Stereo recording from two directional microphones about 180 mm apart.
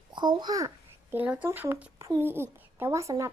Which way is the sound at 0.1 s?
25° right (ahead or behind).